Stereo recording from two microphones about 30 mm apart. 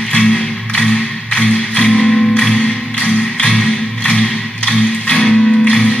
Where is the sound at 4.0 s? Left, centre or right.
Left.